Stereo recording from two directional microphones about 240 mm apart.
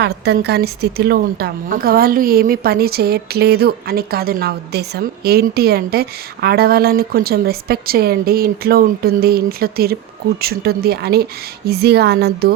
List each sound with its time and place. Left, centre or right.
0.0 s speech: right